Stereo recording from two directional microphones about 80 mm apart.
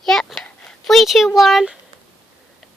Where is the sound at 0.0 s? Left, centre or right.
Centre.